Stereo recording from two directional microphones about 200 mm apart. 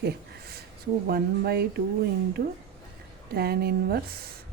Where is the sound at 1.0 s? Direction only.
50° right (ahead or behind).